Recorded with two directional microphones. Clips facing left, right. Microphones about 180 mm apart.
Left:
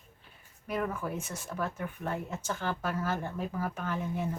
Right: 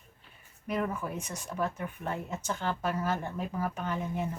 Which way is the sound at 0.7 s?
5° left (ahead or behind).